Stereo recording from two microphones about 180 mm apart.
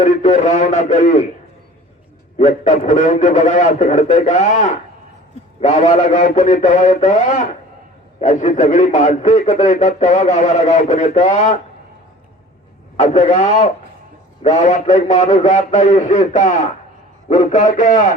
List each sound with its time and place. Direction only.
0.0 s speech: 40° left (ahead or behind)
2.4 s a man's voice: 40° left (ahead or behind)
13.0 s a man's voice: 40° left (ahead or behind)